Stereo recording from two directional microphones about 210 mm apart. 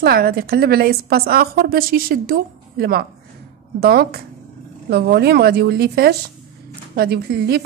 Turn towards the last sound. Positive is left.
turn(degrees=-50)  # may be behind; listen again after turning